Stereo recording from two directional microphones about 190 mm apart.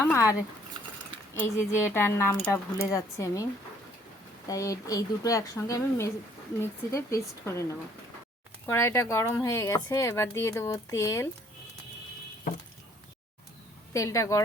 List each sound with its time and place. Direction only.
1.4 s speech: 10° left (ahead or behind)
4.4 s speech: 15° left (ahead or behind)
13.9 s speech: 20° left (ahead or behind)